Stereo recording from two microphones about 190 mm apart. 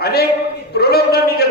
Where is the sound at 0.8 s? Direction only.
55° left (ahead or behind).